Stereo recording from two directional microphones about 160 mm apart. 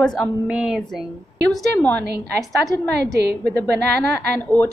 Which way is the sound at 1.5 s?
10° left (ahead or behind).